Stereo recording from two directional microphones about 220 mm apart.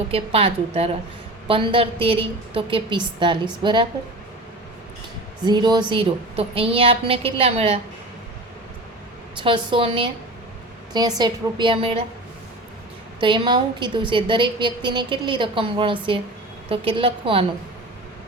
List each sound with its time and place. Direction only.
0.1 s a woman's voice: 25° right (ahead or behind)
5.5 s a woman's voice: 20° right (ahead or behind)
9.4 s a woman's voice: 25° right (ahead or behind)
13.1 s a woman's voice: 20° right (ahead or behind)